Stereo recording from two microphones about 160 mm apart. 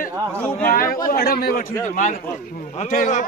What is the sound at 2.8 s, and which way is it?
Speech, 50° left (ahead or behind).